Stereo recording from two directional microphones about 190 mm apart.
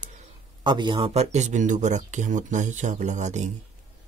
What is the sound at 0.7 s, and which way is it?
Speech, 25° right (ahead or behind).